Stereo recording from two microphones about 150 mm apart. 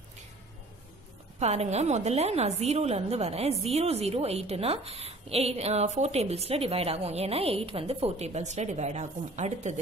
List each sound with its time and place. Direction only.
1.4 s a woman's voice: 45° right (ahead or behind)